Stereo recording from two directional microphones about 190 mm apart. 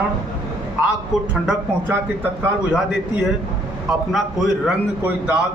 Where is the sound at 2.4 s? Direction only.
5° right (ahead or behind).